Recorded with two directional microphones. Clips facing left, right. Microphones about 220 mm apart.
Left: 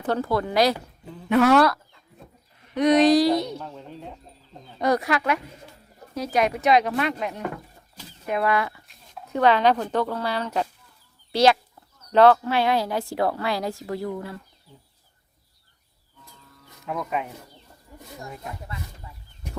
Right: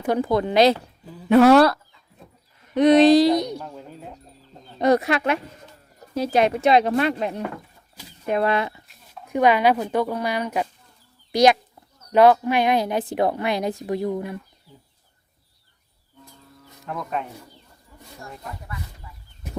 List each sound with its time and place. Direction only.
0.0 s a woman's voice: 15° right (ahead or behind)
1.0 s speech: 5° right (ahead or behind)
1.3 s speech: 35° right (ahead or behind); by 4.2 s 5° right (ahead or behind)
4.8 s a woman's voice: 25° right (ahead or behind)
9.2 s a woman's voice: 15° right (ahead or behind)
16.8 s speech: 5° left (ahead or behind)